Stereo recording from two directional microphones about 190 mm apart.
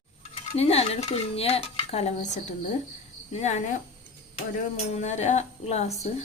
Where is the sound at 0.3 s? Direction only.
35° left (ahead or behind).